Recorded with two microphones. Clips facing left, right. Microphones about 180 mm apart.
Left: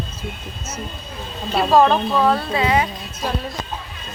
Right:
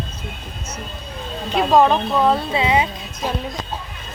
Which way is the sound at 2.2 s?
20° right (ahead or behind).